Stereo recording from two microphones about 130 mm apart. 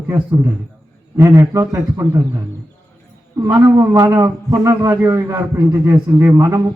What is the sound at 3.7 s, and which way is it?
Speech, 25° right (ahead or behind).